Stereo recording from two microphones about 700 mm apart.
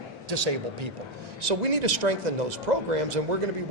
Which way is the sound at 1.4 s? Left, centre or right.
Right.